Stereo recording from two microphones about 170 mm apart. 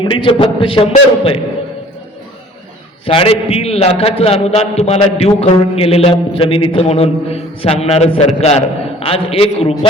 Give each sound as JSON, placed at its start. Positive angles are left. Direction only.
{"t": 0.0, "sound": "a man's voice", "side_deg": 30}
{"t": 3.1, "sound": "a man's voice", "side_deg": 35}